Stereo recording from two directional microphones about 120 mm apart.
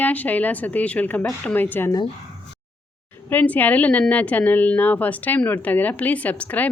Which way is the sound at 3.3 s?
15° left (ahead or behind).